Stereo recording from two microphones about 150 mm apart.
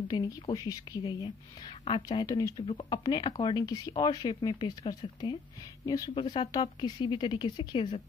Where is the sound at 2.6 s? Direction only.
35° left (ahead or behind).